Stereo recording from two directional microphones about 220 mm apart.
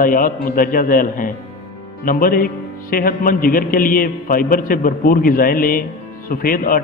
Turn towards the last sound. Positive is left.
turn(degrees=40)  # may be behind; listen again after turning